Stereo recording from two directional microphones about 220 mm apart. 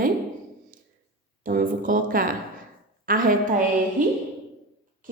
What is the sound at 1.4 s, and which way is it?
A woman's voice, 40° right (ahead or behind).